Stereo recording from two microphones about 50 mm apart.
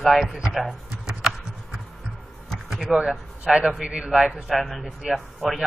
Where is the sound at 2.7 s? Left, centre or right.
Centre.